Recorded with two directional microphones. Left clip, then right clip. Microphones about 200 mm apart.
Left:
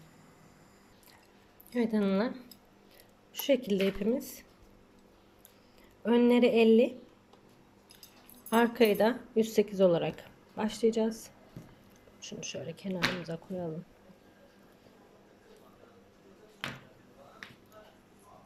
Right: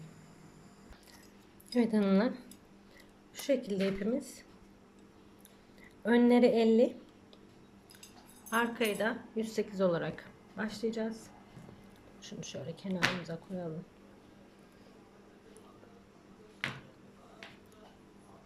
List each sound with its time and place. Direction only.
1.7 s a woman's voice: centre (ahead or behind)
3.3 s speech: 10° left (ahead or behind)
6.1 s a woman's voice: 5° left (ahead or behind)
8.4 s speech: 20° left (ahead or behind)
12.2 s speech: 5° left (ahead or behind)